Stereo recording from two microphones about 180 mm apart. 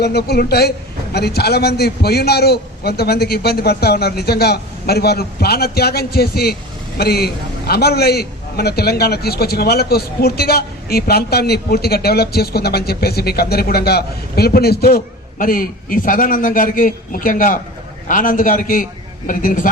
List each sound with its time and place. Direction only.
0.0 s a man's voice: 65° left (ahead or behind); by 19.7 s 50° left (ahead or behind)